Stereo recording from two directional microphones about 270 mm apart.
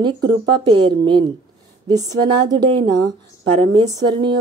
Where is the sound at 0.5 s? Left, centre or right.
Centre.